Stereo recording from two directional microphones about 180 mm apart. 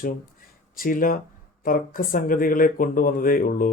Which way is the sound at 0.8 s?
50° left (ahead or behind).